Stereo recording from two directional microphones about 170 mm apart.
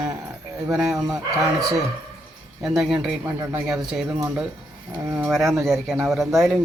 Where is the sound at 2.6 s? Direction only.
5° right (ahead or behind).